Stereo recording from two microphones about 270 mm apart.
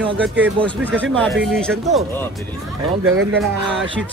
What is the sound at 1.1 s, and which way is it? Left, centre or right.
Speech, centre.